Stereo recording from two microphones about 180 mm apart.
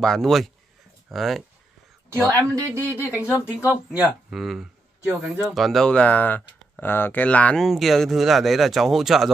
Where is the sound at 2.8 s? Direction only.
15° left (ahead or behind).